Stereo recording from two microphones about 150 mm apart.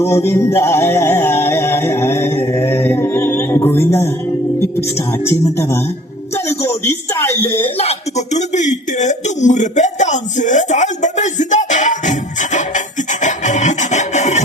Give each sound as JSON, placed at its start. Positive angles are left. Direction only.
{"t": 0.0, "sound": "music", "side_deg": 15}
{"t": 4.9, "sound": "speech", "side_deg": 15}
{"t": 6.3, "sound": "music", "side_deg": 15}
{"t": 6.8, "sound": "speech", "side_deg": 15}
{"t": 7.8, "sound": "a sound", "side_deg": 45}